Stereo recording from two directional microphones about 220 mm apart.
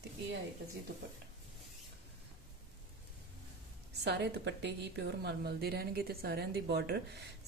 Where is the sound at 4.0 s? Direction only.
50° right (ahead or behind).